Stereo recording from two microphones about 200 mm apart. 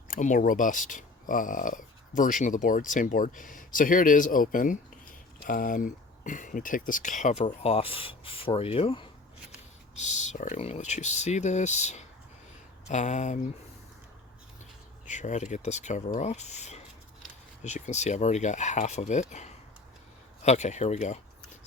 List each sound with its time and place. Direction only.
0.1 s speech: 40° left (ahead or behind)
15.1 s speech: 35° left (ahead or behind)